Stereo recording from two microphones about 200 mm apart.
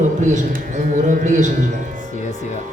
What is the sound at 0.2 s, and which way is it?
A man's voice, 40° right (ahead or behind).